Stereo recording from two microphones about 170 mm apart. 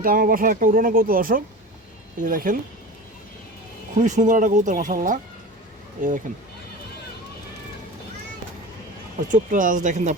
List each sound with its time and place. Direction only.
0.0 s speech: 55° right (ahead or behind)
3.9 s speech: 45° right (ahead or behind)
9.3 s speech: 50° right (ahead or behind)